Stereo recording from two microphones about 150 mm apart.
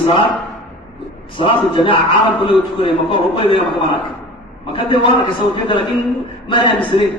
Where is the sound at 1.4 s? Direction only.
35° left (ahead or behind).